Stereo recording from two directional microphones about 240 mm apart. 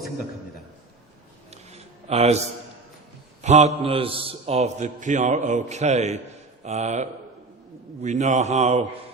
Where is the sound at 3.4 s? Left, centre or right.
Right.